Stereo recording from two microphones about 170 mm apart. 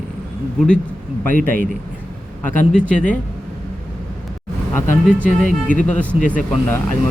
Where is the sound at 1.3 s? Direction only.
55° right (ahead or behind).